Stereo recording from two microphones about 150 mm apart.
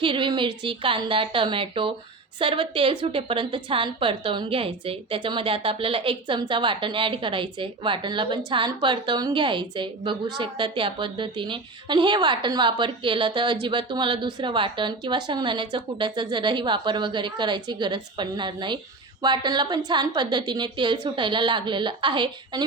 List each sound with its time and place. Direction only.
0.0 s a woman's voice: 35° right (ahead or behind)